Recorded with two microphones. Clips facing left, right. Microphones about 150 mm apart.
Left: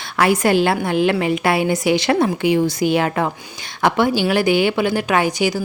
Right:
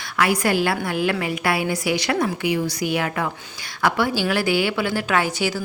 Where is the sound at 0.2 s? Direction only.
25° left (ahead or behind).